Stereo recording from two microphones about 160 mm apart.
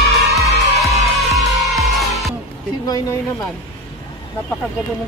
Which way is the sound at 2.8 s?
25° left (ahead or behind).